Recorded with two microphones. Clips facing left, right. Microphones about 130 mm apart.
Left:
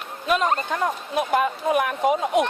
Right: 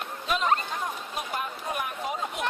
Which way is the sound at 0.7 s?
85° left.